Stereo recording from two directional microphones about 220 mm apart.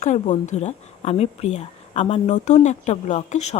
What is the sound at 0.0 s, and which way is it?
Speech, 35° left (ahead or behind).